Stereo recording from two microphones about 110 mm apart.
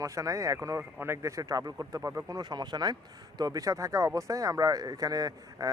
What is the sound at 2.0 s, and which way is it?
Speech, 20° right (ahead or behind).